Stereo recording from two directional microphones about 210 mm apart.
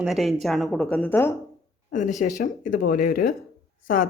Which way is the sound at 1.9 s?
35° left (ahead or behind).